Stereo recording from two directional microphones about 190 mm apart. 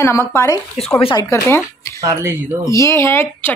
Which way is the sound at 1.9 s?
15° right (ahead or behind).